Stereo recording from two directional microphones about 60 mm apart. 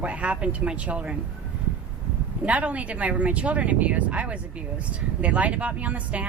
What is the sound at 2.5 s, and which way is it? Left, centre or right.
Speech, right.